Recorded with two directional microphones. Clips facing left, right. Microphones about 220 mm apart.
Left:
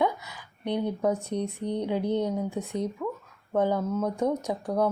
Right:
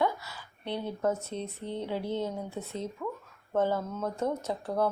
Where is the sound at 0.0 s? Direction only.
15° left (ahead or behind).